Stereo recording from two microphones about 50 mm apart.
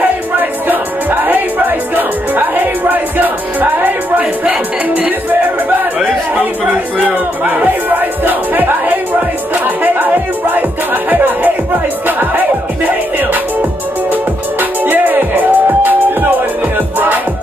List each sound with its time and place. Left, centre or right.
1.2 s music: right
7.6 s music: right
12.8 s music: right